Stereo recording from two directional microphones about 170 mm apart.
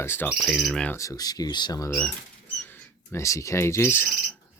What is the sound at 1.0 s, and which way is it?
Speech, 20° left (ahead or behind).